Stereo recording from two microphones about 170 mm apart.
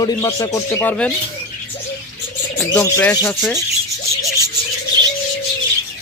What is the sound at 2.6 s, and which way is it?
Speech, 15° left (ahead or behind).